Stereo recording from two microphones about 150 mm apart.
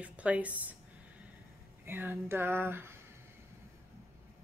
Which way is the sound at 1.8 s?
15° right (ahead or behind).